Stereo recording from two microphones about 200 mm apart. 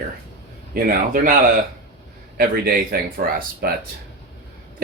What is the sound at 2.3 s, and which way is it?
Speech, 50° right (ahead or behind).